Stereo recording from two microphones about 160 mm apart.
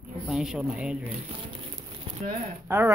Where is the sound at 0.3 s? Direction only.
5° right (ahead or behind).